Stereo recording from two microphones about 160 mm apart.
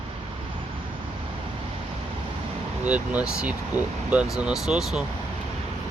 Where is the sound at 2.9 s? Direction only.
10° right (ahead or behind).